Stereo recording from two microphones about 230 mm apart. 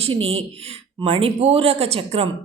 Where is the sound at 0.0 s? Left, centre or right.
Right.